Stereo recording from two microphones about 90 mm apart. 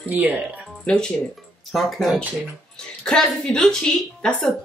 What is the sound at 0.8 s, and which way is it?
Speech, 10° left (ahead or behind).